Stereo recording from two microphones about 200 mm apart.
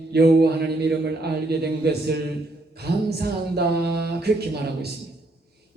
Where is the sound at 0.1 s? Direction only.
55° right (ahead or behind).